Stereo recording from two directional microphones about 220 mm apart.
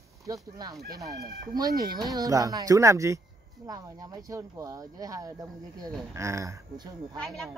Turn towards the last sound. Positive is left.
turn(degrees=0)  # may be behind; listen again after turning